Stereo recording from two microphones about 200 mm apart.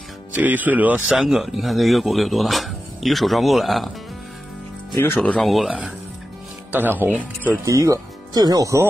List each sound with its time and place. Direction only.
0.3 s speech: 10° right (ahead or behind)
5.0 s speech: 10° left (ahead or behind); by 8.8 s 15° right (ahead or behind)